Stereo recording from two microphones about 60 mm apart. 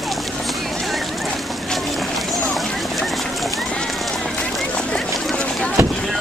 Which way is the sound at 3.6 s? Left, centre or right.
Centre.